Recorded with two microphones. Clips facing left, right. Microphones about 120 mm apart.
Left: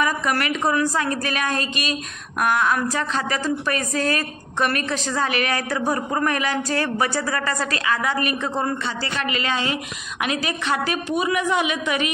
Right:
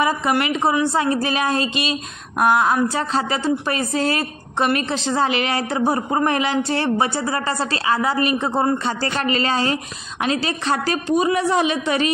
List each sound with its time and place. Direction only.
0.0 s a woman's voice: 25° right (ahead or behind)